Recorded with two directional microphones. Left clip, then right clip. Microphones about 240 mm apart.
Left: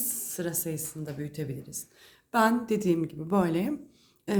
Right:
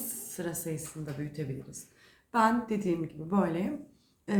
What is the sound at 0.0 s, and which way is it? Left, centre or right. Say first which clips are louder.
Speech: left 4 dB; left.